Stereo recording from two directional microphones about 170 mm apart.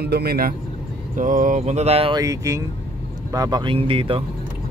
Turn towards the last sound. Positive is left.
turn(degrees=-30)  # may be behind; listen again after turning